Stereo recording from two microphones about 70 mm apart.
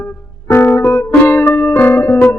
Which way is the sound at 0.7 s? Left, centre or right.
Left.